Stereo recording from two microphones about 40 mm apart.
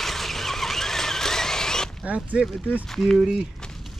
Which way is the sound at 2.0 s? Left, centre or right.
Right.